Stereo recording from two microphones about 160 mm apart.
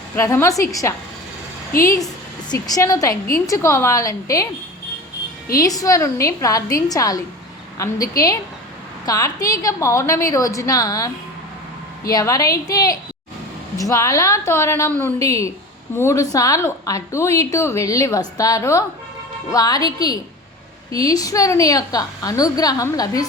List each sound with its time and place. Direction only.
0.2 s a woman's voice: 20° left (ahead or behind)
2.5 s a woman's voice: 25° left (ahead or behind)
5.5 s a woman's voice: 20° left (ahead or behind)